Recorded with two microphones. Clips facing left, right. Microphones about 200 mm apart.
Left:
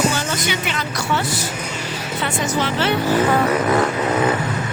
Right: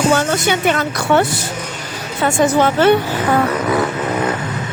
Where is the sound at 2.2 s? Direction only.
50° right (ahead or behind).